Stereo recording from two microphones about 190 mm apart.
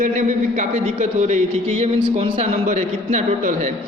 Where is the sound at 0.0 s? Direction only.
40° right (ahead or behind).